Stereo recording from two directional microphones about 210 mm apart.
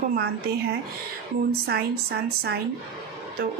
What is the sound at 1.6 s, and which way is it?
Speech, 50° right (ahead or behind).